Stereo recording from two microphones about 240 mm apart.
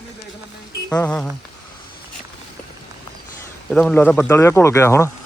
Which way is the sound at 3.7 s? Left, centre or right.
Centre.